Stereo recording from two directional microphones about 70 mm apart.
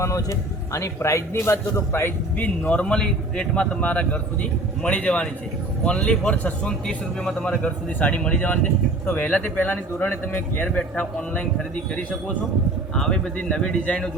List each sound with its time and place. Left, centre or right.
0.0 s a man's voice: left
2.4 s a man's voice: left
6.7 s a man's voice: centre
7.9 s speech: left
13.0 s a man's voice: centre